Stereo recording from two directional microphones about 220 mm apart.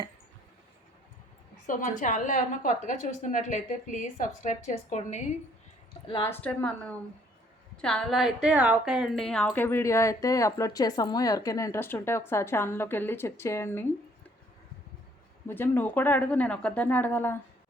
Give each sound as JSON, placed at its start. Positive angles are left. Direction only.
{"t": 1.6, "sound": "a woman's voice", "side_deg": 35}
{"t": 6.1, "sound": "speech", "side_deg": 20}
{"t": 6.3, "sound": "a woman's voice", "side_deg": 5}
{"t": 15.4, "sound": "a woman's voice", "side_deg": 10}